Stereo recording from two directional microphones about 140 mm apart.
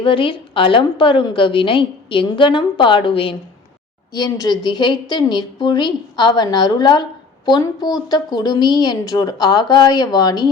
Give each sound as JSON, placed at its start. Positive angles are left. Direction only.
{"t": 0.0, "sound": "a woman's voice", "side_deg": 40}